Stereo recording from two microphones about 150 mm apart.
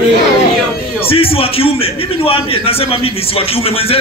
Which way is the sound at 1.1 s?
40° left (ahead or behind).